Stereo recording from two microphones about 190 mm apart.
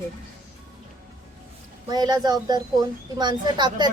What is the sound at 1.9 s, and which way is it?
A woman's voice, 20° right (ahead or behind).